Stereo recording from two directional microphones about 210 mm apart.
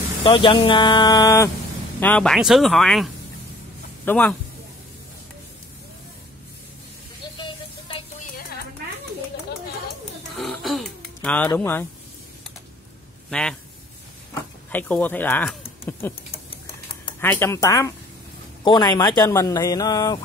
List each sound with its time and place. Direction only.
0.2 s speech: 25° left (ahead or behind)
2.0 s a man's voice: 5° left (ahead or behind)
7.3 s a sound: 20° left (ahead or behind)
10.3 s a sound: centre (ahead or behind)
13.3 s a man's voice: 5° left (ahead or behind)
17.2 s a man's voice: 10° left (ahead or behind)